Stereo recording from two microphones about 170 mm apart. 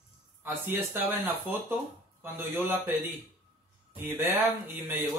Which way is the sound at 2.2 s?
10° right (ahead or behind).